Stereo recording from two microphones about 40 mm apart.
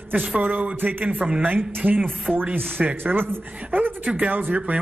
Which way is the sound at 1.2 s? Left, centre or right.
Right.